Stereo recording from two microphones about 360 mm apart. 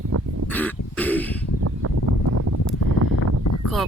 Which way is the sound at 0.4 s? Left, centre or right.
Centre.